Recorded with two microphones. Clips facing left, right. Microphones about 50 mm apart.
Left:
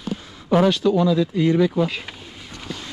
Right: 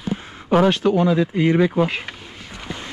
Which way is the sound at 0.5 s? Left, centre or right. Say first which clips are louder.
Right 1 dB; right.